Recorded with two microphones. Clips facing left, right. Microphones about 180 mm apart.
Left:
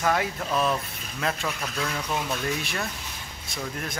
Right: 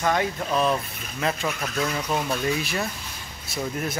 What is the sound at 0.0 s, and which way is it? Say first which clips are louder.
A man's voice: right 2 dB; 5° left (ahead or behind).